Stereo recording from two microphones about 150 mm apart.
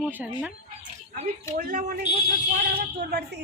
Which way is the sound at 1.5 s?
60° right (ahead or behind).